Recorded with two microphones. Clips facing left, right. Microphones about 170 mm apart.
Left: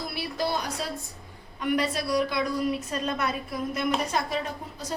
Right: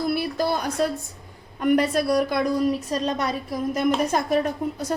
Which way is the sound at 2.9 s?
35° right (ahead or behind).